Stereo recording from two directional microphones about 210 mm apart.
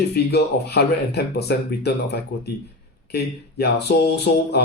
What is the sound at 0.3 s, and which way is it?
Speech, 50° left (ahead or behind).